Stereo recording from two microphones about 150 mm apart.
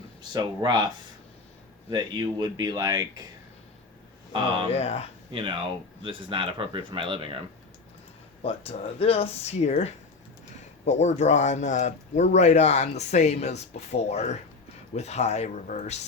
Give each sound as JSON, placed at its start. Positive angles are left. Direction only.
{"t": 0.2, "sound": "speech", "side_deg": -30}
{"t": 1.9, "sound": "speech", "side_deg": -25}
{"t": 4.7, "sound": "speech", "side_deg": 45}
{"t": 5.3, "sound": "speech", "side_deg": -35}
{"t": 8.4, "sound": "speech", "side_deg": 40}